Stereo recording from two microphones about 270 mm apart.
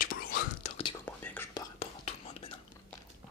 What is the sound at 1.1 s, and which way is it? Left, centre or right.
Whispering, centre.